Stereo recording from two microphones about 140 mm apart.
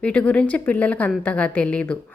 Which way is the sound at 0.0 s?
10° left (ahead or behind).